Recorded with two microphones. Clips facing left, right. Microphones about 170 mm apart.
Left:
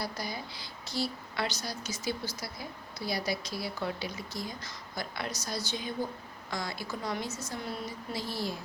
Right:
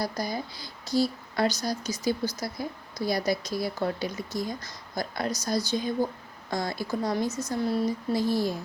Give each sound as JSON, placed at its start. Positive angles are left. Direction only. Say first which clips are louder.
{"t": 0.0, "sound": "speech", "louder": "right 6 dB", "side_deg": -45}
{"t": 7.3, "sound": "a woman's voice", "louder": "right 8 dB", "side_deg": -15}
{"t": 8.1, "sound": "speech", "louder": "right 8 dB", "side_deg": -45}